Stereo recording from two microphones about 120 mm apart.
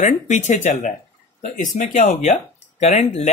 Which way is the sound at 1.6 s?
85° left.